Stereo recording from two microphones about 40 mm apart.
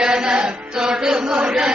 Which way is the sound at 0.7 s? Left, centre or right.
Centre.